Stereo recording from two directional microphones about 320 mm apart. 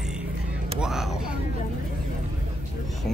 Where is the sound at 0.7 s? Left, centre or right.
Centre.